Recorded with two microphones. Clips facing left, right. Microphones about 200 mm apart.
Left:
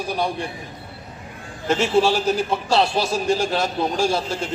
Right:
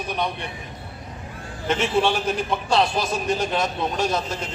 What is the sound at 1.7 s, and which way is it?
Speech, 25° left (ahead or behind).